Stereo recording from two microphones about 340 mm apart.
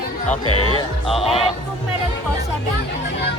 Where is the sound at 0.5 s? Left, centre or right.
Left.